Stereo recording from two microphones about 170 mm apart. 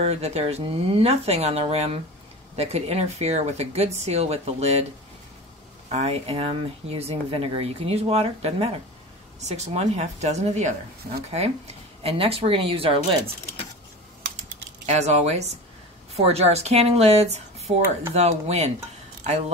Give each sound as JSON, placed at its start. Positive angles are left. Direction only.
{"t": 0.0, "sound": "speech", "side_deg": -40}
{"t": 5.9, "sound": "speech", "side_deg": -40}
{"t": 14.9, "sound": "speech", "side_deg": -40}